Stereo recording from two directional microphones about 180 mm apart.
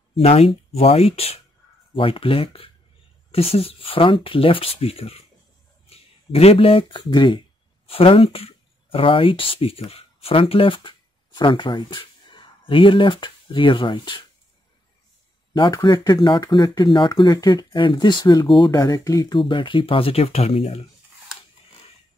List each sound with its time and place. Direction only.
0.1 s speech: 35° left (ahead or behind)
15.5 s speech: 25° left (ahead or behind)